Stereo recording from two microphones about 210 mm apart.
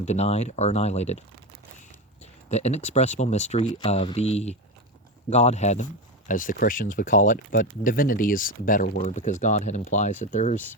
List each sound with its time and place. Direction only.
0.0 s speech: 30° left (ahead or behind)
2.5 s speech: 30° left (ahead or behind)